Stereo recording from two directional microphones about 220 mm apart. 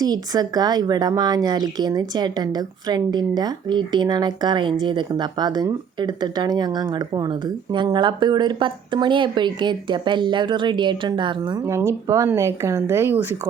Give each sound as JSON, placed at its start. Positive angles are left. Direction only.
{"t": 0.0, "sound": "speech", "side_deg": -15}